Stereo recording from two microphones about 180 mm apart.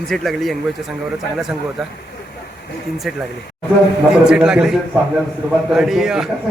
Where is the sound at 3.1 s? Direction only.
Centre (ahead or behind).